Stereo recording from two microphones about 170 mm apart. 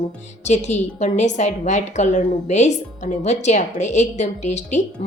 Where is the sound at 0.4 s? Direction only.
45° left (ahead or behind).